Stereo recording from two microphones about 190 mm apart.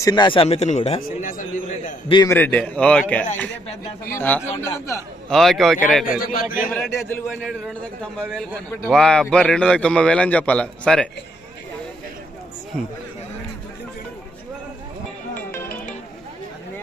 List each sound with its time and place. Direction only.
0.0 s speech: 20° left (ahead or behind)
1.0 s a man's voice: 45° left (ahead or behind)
2.0 s a man's voice: 20° left (ahead or behind); by 6.2 s centre (ahead or behind)
6.2 s a man's voice: 50° left (ahead or behind)
6.7 s a man's voice: centre (ahead or behind)